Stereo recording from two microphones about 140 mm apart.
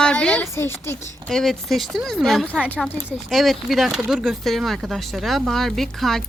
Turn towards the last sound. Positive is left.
turn(degrees=0)  # may be behind; listen again after turning